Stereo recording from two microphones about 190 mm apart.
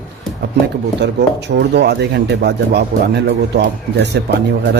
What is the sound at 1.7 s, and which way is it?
Speech, 60° right (ahead or behind).